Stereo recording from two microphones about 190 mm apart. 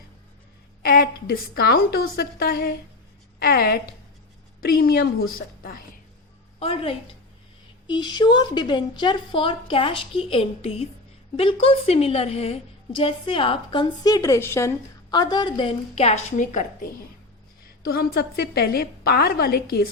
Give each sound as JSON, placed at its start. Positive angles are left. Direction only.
{"t": 0.8, "sound": "a woman's voice", "side_deg": 50}
{"t": 6.6, "sound": "a woman's voice", "side_deg": 30}
{"t": 17.8, "sound": "a woman's voice", "side_deg": 55}